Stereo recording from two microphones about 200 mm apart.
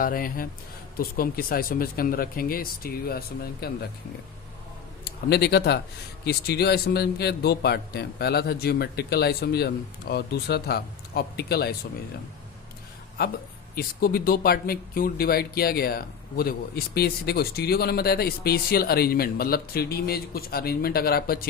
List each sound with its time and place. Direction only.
0.0 s speech: 45° left (ahead or behind)
5.3 s speech: 55° left (ahead or behind)
13.7 s speech: 45° left (ahead or behind)